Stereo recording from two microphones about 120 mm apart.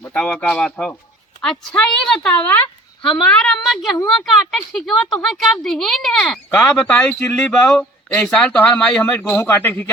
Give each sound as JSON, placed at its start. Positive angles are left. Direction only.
{"t": 0.0, "sound": "a man's voice", "side_deg": 10}